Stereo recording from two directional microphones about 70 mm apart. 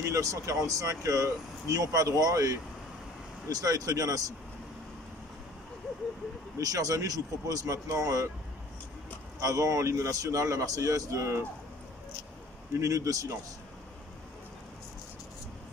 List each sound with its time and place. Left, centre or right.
0.0 s a man's voice: right
6.6 s speech: right
9.4 s a man's voice: right
12.7 s a man's voice: right